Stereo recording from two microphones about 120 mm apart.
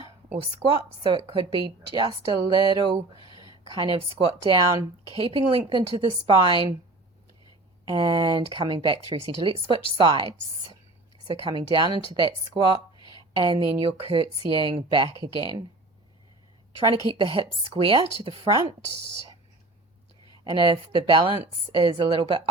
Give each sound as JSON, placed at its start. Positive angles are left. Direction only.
{"t": 0.3, "sound": "a woman's voice", "side_deg": -50}
{"t": 7.9, "sound": "a woman's voice", "side_deg": -40}
{"t": 16.9, "sound": "speech", "side_deg": -45}
{"t": 20.4, "sound": "speech", "side_deg": -45}